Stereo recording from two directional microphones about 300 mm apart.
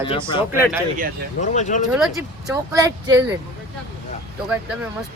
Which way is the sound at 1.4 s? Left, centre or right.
Left.